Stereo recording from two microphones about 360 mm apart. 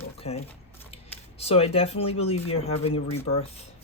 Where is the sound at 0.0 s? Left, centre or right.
Centre.